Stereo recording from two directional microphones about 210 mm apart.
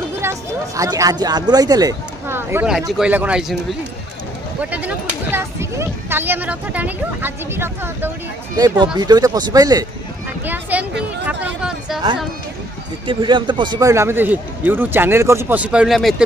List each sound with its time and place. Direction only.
0.2 s speech: 15° right (ahead or behind)
4.6 s speech: 5° right (ahead or behind)
13.0 s speech: 20° right (ahead or behind); by 16.2 s centre (ahead or behind)